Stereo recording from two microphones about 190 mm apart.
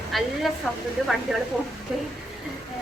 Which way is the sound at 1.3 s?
5° right (ahead or behind).